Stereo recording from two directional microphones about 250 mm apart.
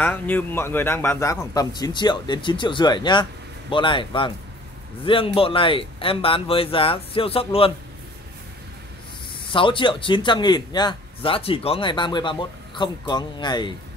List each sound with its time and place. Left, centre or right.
0.0 s a man's voice: centre; by 7.7 s left
9.5 s a man's voice: centre